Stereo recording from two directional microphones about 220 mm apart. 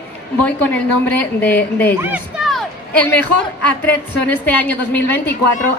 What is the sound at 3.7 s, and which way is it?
A woman's voice, 5° left (ahead or behind).